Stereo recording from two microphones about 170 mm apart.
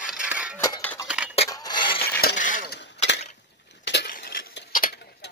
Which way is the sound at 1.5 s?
25° left (ahead or behind).